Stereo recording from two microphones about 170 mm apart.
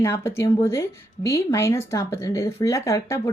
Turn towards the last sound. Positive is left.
turn(degrees=20)  # may be behind; listen again after turning